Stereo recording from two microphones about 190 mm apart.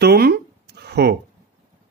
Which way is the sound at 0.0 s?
55° right (ahead or behind).